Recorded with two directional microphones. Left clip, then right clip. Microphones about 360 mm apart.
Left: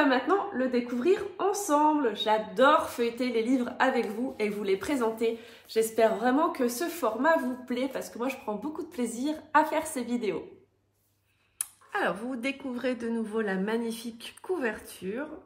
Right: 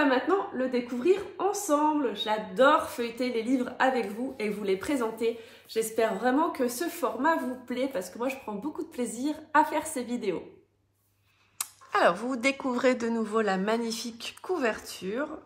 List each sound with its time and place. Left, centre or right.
0.0 s a woman's voice: centre
11.5 s speech: centre